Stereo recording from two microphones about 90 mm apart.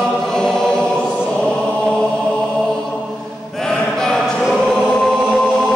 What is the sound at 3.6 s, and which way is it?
Choir, 5° left (ahead or behind).